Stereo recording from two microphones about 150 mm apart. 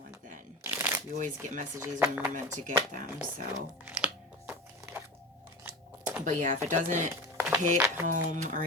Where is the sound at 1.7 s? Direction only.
15° right (ahead or behind).